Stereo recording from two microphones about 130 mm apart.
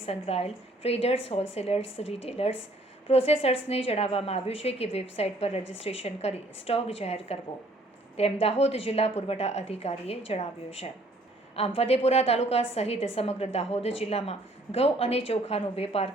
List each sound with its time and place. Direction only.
0.0 s a woman's voice: 50° left (ahead or behind)